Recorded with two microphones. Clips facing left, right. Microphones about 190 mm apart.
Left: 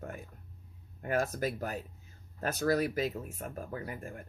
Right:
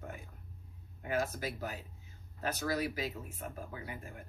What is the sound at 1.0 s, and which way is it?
Speech, 50° left (ahead or behind).